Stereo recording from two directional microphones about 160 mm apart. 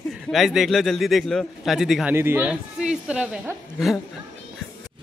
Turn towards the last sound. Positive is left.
turn(degrees=-5)  # may be behind; listen again after turning